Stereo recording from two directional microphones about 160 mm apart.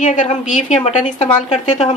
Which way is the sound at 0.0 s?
50° left (ahead or behind).